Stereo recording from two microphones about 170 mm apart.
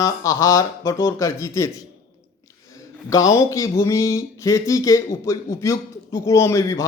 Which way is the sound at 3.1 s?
15° left (ahead or behind).